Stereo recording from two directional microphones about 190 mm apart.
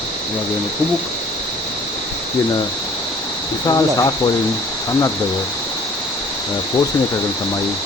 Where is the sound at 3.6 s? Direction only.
20° left (ahead or behind).